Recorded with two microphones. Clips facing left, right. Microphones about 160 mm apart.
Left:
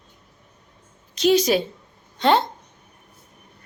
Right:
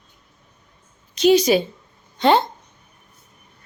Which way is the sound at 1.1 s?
Centre (ahead or behind).